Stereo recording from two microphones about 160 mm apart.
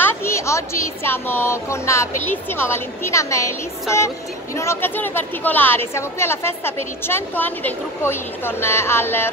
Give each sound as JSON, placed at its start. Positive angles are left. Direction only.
{"t": 0.0, "sound": "a woman's voice", "side_deg": 15}
{"t": 4.6, "sound": "a woman's voice", "side_deg": 15}